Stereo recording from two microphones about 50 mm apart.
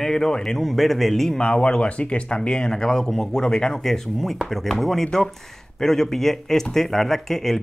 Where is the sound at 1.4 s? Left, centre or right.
Left.